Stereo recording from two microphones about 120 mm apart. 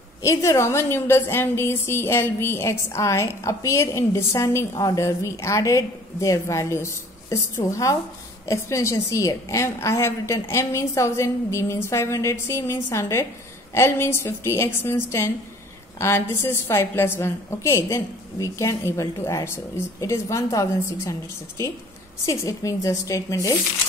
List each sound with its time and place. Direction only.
0.2 s a woman's voice: 25° left (ahead or behind)